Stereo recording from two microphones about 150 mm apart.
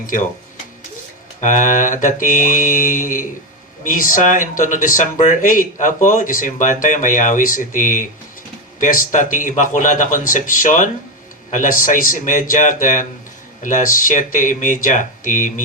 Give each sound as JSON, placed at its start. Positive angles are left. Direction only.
{"t": 0.0, "sound": "speech", "side_deg": 65}
{"t": 1.4, "sound": "speech", "side_deg": 60}